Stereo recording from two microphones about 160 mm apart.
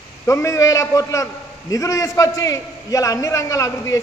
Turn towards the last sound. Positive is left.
turn(degrees=20)  # may be behind; listen again after turning